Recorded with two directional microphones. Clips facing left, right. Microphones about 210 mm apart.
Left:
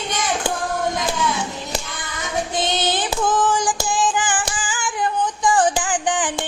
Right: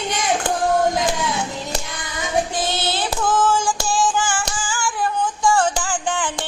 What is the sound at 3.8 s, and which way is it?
Female singing, 20° left (ahead or behind).